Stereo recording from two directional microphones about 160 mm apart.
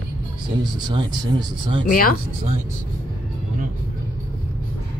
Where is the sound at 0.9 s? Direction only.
30° right (ahead or behind).